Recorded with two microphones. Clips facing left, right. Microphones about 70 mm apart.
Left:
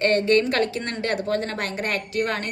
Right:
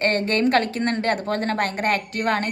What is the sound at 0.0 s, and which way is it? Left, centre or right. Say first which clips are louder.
A woman's voice: left 1 dB; right.